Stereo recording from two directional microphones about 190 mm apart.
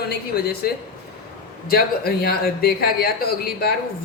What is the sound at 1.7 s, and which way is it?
Speech, 55° left (ahead or behind).